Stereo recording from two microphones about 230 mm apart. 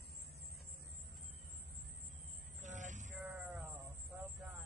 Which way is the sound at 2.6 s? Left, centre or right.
Right.